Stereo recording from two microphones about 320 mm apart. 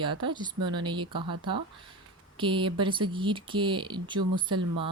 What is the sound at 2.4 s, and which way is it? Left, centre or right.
Speech, centre.